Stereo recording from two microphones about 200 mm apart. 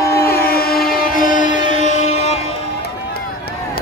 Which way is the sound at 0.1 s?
50° left (ahead or behind).